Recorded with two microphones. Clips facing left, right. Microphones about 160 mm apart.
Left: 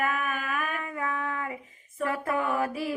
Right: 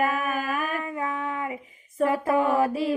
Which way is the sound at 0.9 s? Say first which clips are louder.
Right 2 dB; 20° right (ahead or behind).